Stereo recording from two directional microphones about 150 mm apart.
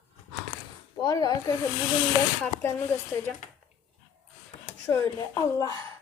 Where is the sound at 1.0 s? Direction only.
25° left (ahead or behind).